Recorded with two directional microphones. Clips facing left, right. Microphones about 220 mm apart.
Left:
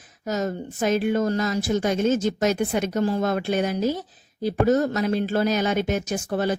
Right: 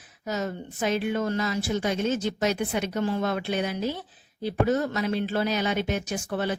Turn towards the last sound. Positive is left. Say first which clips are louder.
# left 4 dB
turn(degrees=40)  # may be behind; listen again after turning